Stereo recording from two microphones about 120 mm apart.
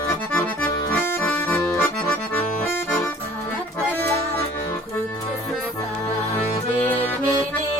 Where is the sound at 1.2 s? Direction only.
15° left (ahead or behind).